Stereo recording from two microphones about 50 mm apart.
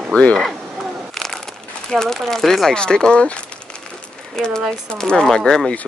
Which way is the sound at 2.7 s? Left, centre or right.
Centre.